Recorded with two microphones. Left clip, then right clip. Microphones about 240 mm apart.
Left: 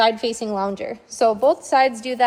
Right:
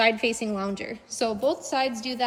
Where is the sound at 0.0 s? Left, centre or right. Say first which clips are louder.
Left 4 dB; centre.